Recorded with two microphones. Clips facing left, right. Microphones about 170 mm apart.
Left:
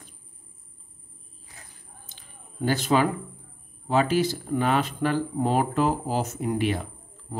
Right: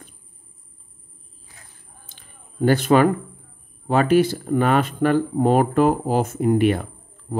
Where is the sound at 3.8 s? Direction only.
55° right (ahead or behind).